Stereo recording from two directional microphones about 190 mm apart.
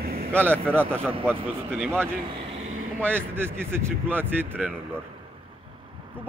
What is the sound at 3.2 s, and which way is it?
Speech, 10° right (ahead or behind).